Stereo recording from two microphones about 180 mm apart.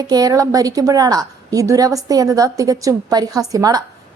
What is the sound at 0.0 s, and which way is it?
A woman's voice, 20° right (ahead or behind).